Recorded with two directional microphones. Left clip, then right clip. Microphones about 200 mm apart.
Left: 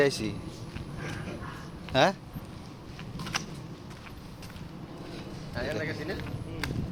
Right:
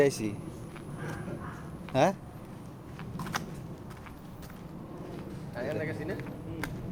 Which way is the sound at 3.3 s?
20° right (ahead or behind).